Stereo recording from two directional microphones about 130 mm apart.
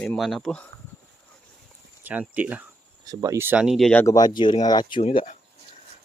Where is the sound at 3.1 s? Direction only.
30° right (ahead or behind).